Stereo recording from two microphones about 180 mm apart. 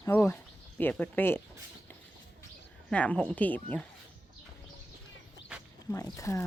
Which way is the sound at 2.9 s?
5° left (ahead or behind).